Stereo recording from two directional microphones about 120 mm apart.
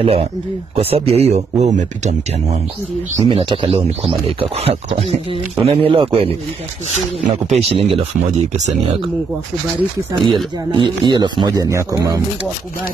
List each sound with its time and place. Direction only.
0.0 s speech: 55° right (ahead or behind); by 2.6 s 85° right
3.3 s speech: 45° right (ahead or behind)
7.4 s speech: 60° right (ahead or behind)
8.2 s speech: 75° right (ahead or behind)
10.2 s speech: 40° right (ahead or behind)